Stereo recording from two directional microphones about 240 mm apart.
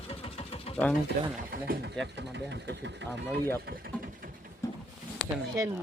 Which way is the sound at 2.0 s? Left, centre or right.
Centre.